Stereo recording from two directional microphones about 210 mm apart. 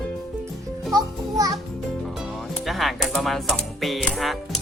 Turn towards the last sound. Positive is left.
turn(degrees=0)  # may be behind; listen again after turning